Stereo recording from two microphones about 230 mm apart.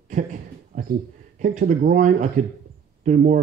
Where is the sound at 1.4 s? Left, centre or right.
Right.